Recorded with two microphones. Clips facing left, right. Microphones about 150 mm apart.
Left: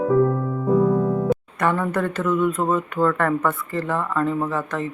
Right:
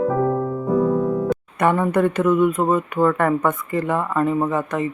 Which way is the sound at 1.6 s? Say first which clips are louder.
Right 8 dB; 20° right (ahead or behind).